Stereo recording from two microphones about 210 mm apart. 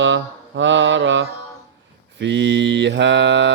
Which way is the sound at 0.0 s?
60° right (ahead or behind).